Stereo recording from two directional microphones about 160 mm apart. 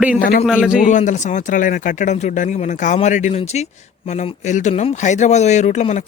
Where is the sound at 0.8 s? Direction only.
50° left (ahead or behind).